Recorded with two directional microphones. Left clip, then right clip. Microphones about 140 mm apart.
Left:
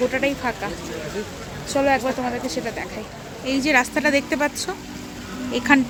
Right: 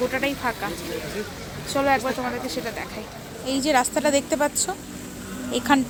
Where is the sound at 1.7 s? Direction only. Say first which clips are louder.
Left 2 dB; 25° left (ahead or behind).